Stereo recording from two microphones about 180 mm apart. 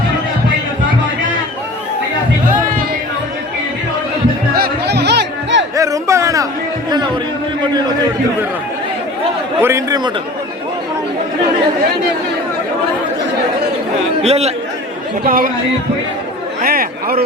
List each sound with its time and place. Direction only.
4.5 s music: 65° right (ahead or behind)
5.7 s a sound: 20° right (ahead or behind)
9.6 s a man's voice: 15° right (ahead or behind)
14.2 s a man's voice: 35° right (ahead or behind)
15.3 s speech: 50° right (ahead or behind)
16.6 s speech: 55° right (ahead or behind)